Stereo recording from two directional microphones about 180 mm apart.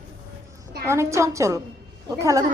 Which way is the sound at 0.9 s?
15° right (ahead or behind).